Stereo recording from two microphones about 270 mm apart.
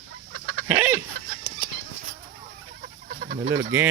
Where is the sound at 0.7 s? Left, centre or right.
Centre.